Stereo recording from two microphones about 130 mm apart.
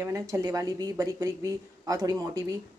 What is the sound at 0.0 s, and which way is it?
A woman's voice, 25° right (ahead or behind).